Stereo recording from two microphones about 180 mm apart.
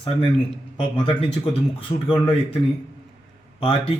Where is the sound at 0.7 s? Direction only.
30° left (ahead or behind).